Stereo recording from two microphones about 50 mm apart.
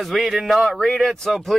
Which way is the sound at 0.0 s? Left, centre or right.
Centre.